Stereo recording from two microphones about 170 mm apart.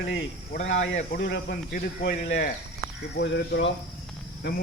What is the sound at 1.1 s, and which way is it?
Speech, 80° left.